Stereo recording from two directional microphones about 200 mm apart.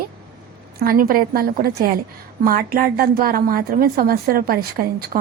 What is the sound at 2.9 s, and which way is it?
A woman's voice, 45° right (ahead or behind).